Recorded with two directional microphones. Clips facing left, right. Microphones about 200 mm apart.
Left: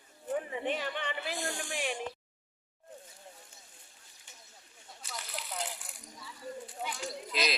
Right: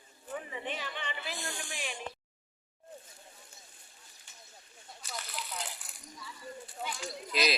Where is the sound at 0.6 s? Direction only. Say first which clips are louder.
Left 5 dB; 55° left (ahead or behind).